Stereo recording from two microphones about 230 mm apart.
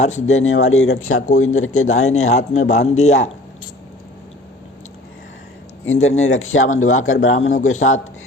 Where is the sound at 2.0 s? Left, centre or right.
Left.